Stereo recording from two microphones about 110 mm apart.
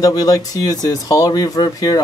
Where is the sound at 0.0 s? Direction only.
35° left (ahead or behind).